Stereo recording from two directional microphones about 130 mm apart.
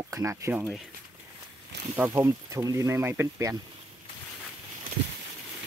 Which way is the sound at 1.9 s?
15° right (ahead or behind).